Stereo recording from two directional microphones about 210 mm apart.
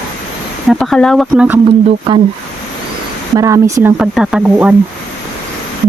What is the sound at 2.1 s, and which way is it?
Speech, 25° right (ahead or behind).